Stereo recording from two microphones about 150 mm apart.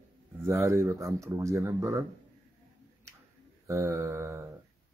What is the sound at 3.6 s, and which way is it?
Speech, 20° right (ahead or behind).